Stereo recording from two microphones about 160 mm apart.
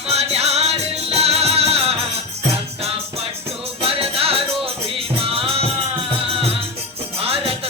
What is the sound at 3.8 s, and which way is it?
Music, 35° right (ahead or behind).